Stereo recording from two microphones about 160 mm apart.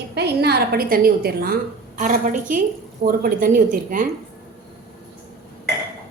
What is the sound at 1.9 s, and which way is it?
Speech, 55° right (ahead or behind).